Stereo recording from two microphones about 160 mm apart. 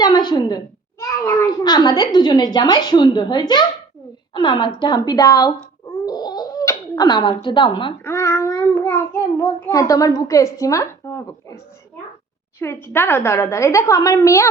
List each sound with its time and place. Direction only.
0.0 s a child's voice: 25° left (ahead or behind)
6.1 s a sound: 25° left (ahead or behind)
8.0 s a child's voice: 15° left (ahead or behind)